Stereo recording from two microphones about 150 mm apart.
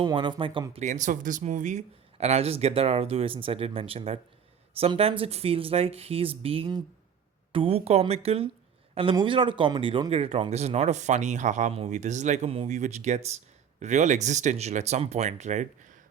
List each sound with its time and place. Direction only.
0.0 s speech: 30° right (ahead or behind)
0.7 s speech: 55° right (ahead or behind)